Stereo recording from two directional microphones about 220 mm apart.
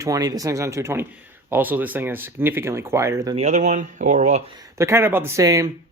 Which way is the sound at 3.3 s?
30° right (ahead or behind).